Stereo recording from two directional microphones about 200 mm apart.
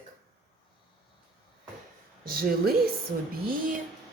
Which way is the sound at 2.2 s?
45° right (ahead or behind).